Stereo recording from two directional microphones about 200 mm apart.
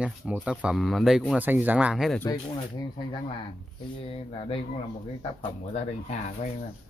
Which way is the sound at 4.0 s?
30° left (ahead or behind).